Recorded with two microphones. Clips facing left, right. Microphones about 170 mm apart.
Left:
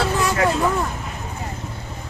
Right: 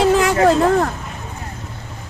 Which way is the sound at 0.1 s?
90° right.